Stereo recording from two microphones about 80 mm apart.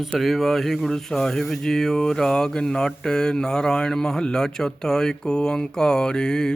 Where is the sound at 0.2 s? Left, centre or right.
Centre.